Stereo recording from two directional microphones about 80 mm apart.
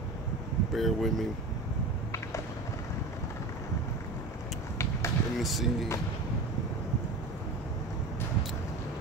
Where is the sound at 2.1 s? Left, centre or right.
Left.